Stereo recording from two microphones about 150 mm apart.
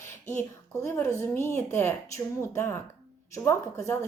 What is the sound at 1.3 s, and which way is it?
Speech, 15° left (ahead or behind).